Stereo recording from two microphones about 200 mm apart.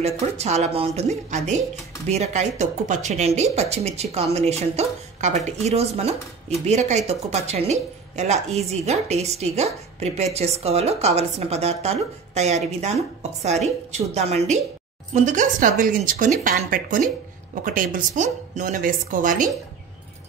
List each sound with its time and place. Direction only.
0.0 s speech: 30° right (ahead or behind)